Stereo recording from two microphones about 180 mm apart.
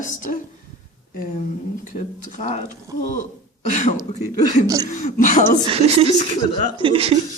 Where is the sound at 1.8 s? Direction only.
45° left (ahead or behind).